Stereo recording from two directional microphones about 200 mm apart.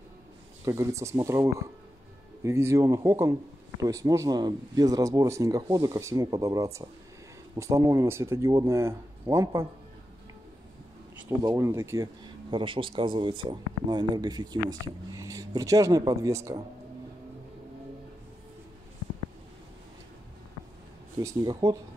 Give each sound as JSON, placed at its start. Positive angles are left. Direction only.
{"t": 0.7, "sound": "speech", "side_deg": -15}
{"t": 11.1, "sound": "speech", "side_deg": -15}
{"t": 12.4, "sound": "speech", "side_deg": -25}
{"t": 21.2, "sound": "speech", "side_deg": -15}